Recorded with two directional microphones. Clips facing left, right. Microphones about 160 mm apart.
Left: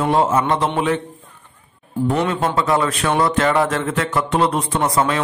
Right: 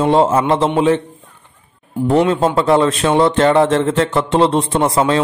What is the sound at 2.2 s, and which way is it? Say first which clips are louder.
A man's voice: right 9 dB; 30° right (ahead or behind).